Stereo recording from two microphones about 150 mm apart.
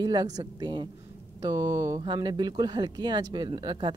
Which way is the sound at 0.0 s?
25° right (ahead or behind).